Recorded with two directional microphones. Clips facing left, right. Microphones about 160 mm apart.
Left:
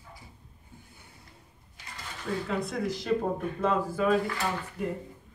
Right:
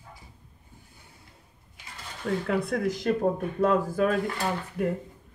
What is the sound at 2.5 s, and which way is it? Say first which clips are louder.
Speech: right 5 dB; 55° right (ahead or behind).